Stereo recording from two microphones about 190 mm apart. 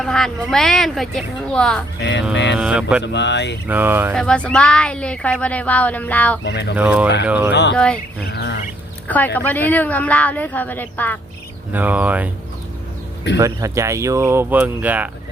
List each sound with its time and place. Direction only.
0.0 s speech: centre (ahead or behind)
2.0 s speech: 70° left (ahead or behind)
2.6 s speech: 5° right (ahead or behind)
3.0 s speech: 65° left (ahead or behind)
3.7 s speech: 10° right (ahead or behind)
4.1 s speech: 5° left (ahead or behind)
6.4 s speech: 65° left (ahead or behind)
6.7 s speech: 5° right (ahead or behind)
7.5 s speech: 65° left (ahead or behind)
9.0 s speech: 10° left (ahead or behind)
11.7 s speech: 10° right (ahead or behind)
13.4 s speech: 15° right (ahead or behind)